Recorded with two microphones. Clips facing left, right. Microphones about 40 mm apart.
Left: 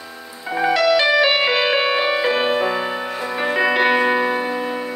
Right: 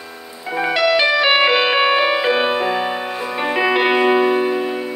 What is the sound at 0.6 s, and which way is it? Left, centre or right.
Music, centre.